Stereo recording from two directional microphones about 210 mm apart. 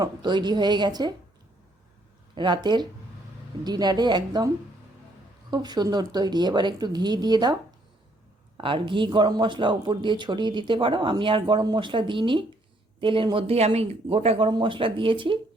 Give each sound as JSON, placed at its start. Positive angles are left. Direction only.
{"t": 0.0, "sound": "speech", "side_deg": -20}
{"t": 2.3, "sound": "speech", "side_deg": -20}
{"t": 5.5, "sound": "speech", "side_deg": -20}
{"t": 8.5, "sound": "speech", "side_deg": -25}